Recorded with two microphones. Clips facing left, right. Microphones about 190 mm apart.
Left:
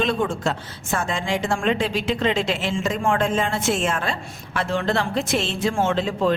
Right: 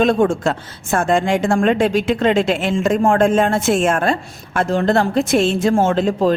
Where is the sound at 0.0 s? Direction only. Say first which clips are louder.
Right 7 dB; 50° right (ahead or behind).